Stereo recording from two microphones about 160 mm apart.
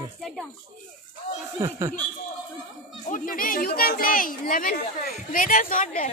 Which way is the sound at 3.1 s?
60° left (ahead or behind).